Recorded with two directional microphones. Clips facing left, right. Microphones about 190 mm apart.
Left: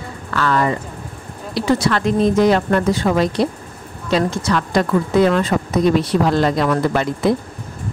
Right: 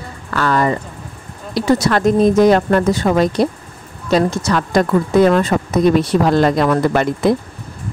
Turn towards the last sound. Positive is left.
turn(degrees=-50)  # may be behind; listen again after turning